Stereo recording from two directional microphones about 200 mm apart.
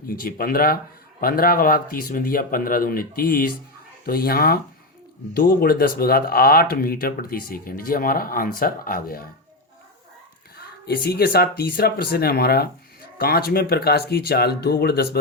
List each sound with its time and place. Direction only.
0.1 s speech: 45° left (ahead or behind)
10.8 s speech: 50° left (ahead or behind)